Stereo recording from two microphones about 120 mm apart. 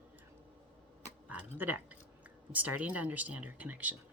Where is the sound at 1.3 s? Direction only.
15° right (ahead or behind).